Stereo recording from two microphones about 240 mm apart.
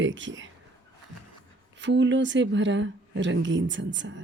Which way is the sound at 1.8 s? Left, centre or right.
Right.